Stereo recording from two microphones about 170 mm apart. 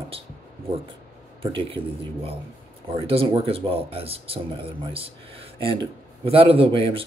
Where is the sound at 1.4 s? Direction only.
30° right (ahead or behind).